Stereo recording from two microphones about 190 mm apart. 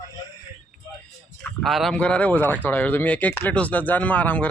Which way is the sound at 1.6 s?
Centre (ahead or behind).